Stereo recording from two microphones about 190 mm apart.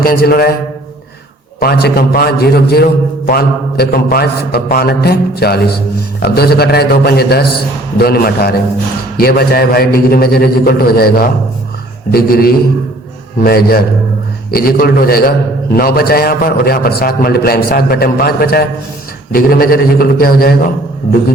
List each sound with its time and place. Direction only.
0.0 s a man's voice: 50° left (ahead or behind)
1.5 s a man's voice: 50° left (ahead or behind)